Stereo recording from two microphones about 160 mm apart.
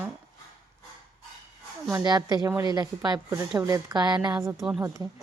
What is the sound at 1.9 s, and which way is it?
A woman's voice, 20° right (ahead or behind).